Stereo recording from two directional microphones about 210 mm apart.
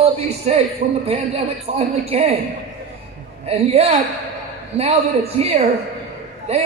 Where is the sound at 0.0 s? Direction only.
30° right (ahead or behind).